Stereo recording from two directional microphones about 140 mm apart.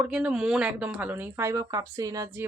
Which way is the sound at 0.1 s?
5° right (ahead or behind).